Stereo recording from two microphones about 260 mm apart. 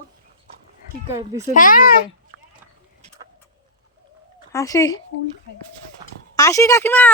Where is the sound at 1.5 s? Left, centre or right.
Left.